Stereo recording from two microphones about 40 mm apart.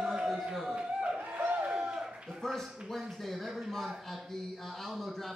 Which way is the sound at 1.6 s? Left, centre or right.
Right.